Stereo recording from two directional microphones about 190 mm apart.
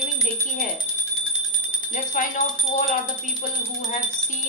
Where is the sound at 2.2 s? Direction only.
45° left (ahead or behind).